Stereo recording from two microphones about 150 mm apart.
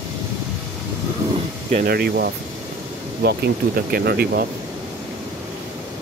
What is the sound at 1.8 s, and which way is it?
Speech, 90° right.